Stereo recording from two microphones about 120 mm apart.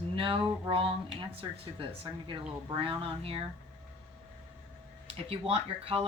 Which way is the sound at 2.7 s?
45° right (ahead or behind).